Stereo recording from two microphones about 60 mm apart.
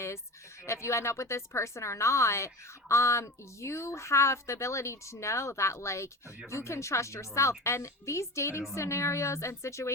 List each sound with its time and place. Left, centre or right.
0.6 s speech: left